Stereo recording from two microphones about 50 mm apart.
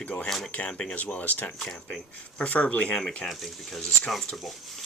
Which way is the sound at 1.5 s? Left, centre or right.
Centre.